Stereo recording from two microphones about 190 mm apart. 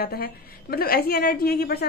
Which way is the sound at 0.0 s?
55° left (ahead or behind).